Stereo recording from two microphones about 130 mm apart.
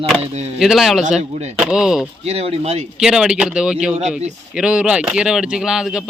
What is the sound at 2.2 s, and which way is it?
Speech, 55° right (ahead or behind).